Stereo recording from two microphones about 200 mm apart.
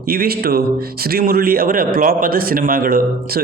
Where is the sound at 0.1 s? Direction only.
50° right (ahead or behind).